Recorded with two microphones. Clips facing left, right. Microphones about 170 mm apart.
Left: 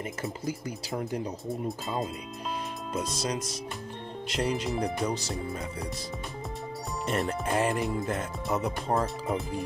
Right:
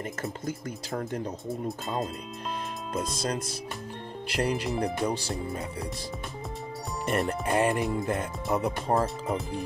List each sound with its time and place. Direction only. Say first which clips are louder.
0.9 s speech: even; 10° left (ahead or behind)
1.5 s speech: even; centre (ahead or behind)
3.1 s speech: right 1 dB; 55° right (ahead or behind)
4.3 s speech: right 1 dB; centre (ahead or behind)
7.1 s speech: right 2 dB; centre (ahead or behind)